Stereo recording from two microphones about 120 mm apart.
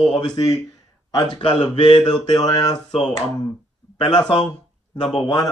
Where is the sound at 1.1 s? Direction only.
30° left (ahead or behind).